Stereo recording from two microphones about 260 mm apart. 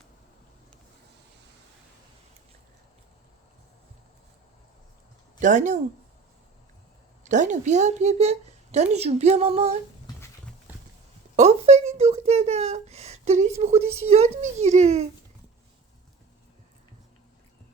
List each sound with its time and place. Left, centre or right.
5.4 s speech: right
7.3 s a woman's voice: right
10.7 s horse: centre
11.3 s a woman's voice: right